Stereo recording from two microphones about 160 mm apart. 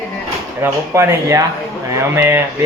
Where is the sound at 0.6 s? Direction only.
15° right (ahead or behind).